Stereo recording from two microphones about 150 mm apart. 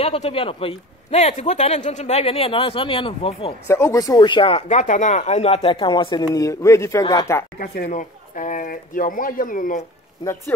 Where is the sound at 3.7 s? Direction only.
20° left (ahead or behind).